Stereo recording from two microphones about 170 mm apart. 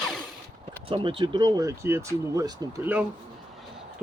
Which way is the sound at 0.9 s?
30° right (ahead or behind).